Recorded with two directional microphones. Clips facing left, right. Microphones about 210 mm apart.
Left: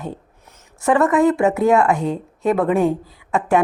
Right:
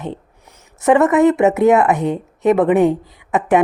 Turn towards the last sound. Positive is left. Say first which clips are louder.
# right 3 dB
turn(degrees=-20)  # may be behind; listen again after turning